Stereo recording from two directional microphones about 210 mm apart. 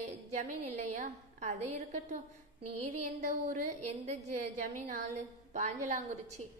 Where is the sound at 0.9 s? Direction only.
35° right (ahead or behind).